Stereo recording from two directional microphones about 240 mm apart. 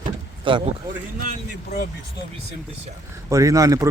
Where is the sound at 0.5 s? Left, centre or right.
Right.